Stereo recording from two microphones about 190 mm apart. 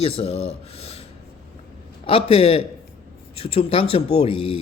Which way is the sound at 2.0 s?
30° left (ahead or behind).